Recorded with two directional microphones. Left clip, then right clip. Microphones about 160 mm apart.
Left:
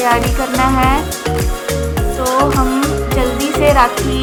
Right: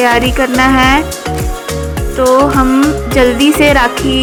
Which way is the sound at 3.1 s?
35° right (ahead or behind).